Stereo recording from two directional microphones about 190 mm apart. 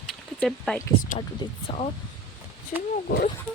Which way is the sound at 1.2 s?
30° left (ahead or behind).